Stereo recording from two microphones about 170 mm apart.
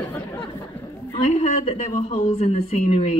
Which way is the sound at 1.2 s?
40° left (ahead or behind).